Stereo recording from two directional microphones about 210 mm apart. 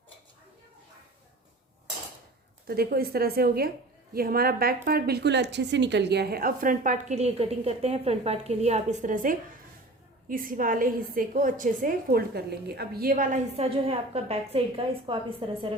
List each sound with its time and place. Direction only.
2.6 s a woman's voice: 45° right (ahead or behind); by 15.7 s 25° right (ahead or behind)